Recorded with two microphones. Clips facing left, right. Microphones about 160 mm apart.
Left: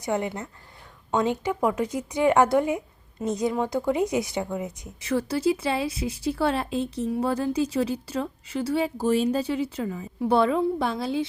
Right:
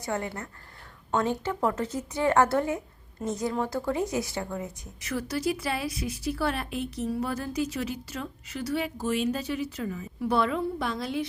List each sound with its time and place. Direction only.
0.0 s a woman's voice: 20° left (ahead or behind)